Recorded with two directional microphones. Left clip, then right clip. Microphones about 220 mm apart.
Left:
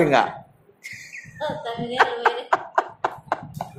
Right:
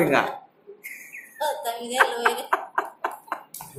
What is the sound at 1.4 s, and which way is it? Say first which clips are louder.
Speech: right 1 dB; 20° right (ahead or behind).